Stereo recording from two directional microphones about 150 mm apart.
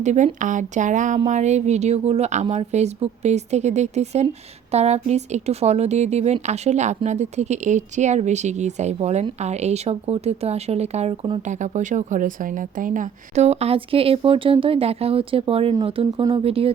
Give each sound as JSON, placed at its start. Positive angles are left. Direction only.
{"t": 0.0, "sound": "speech", "side_deg": -50}
{"t": 11.4, "sound": "speech", "side_deg": -55}